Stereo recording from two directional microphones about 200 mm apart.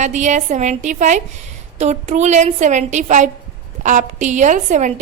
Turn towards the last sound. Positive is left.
turn(degrees=-35)  # may be behind; listen again after turning